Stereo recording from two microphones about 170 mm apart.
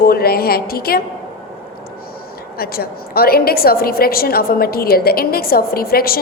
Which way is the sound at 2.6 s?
65° left (ahead or behind).